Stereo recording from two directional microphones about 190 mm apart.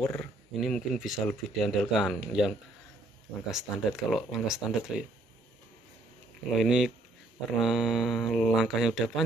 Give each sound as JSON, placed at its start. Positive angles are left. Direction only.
{"t": 0.0, "sound": "speech", "side_deg": 10}
{"t": 0.6, "sound": "speech", "side_deg": 0}
{"t": 6.6, "sound": "speech", "side_deg": -5}